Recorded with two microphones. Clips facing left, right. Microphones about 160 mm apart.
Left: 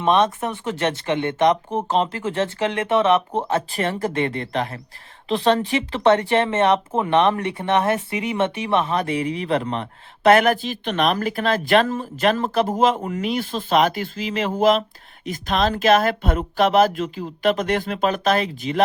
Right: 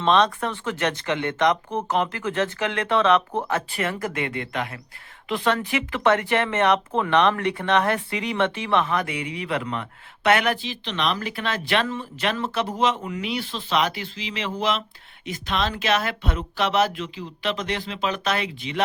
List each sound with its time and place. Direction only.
0.0 s speech: 20° left (ahead or behind); by 18.8 s 45° left (ahead or behind)